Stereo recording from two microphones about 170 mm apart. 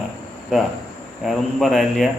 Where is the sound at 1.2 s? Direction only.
Centre (ahead or behind).